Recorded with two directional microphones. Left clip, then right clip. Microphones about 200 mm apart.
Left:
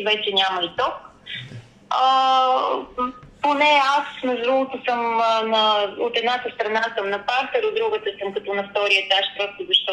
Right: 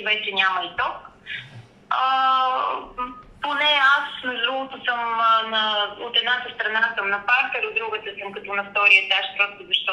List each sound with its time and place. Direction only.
0.0 s speech: 35° left (ahead or behind)